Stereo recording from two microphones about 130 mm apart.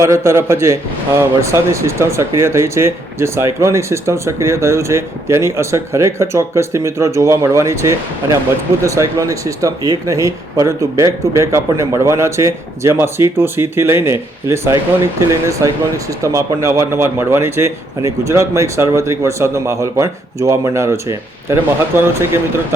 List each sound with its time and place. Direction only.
0.0 s speech: 20° right (ahead or behind)